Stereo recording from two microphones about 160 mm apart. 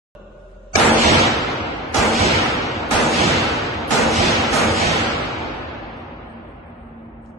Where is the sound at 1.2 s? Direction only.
Centre (ahead or behind).